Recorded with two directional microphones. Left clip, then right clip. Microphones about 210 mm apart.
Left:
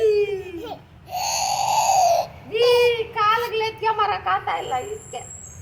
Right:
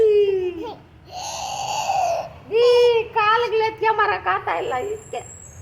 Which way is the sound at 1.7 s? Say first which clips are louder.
Left 4 dB; 20° left (ahead or behind).